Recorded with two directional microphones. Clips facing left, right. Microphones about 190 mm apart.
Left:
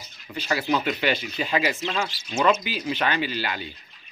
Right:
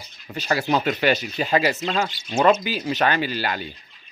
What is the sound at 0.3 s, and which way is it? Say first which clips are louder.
Speech: right 3 dB; 45° right (ahead or behind).